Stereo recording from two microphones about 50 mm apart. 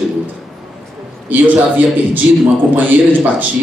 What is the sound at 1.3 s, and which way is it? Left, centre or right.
Speech, right.